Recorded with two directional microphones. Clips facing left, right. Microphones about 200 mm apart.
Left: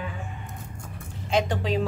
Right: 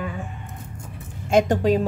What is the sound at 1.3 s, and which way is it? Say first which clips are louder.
Speech: right 7 dB; 45° right (ahead or behind).